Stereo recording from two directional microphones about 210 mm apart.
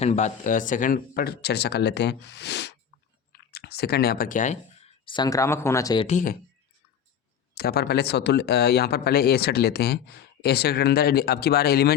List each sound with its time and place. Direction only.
0.0 s speech: 35° left (ahead or behind)
6.1 s speech: 35° left (ahead or behind)
7.5 s speech: 50° left (ahead or behind)